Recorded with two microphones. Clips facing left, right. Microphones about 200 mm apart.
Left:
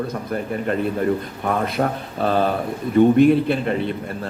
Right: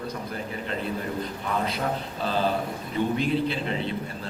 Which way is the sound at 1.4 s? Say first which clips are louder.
Left 7 dB; 55° left (ahead or behind).